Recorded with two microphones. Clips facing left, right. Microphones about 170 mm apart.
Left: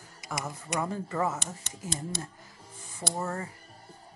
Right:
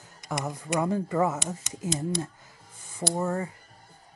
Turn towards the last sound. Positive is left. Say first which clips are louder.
# right 5 dB
turn(degrees=-15)  # may be behind; listen again after turning